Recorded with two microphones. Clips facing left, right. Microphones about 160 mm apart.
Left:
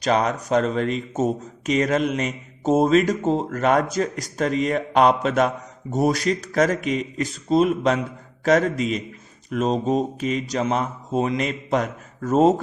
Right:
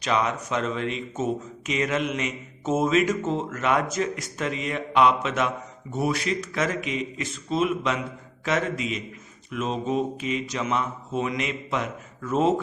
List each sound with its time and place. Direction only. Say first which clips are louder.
0.0 s speech: left 4 dB; 40° left (ahead or behind)